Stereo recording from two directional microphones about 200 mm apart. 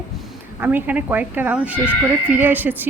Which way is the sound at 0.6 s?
10° right (ahead or behind).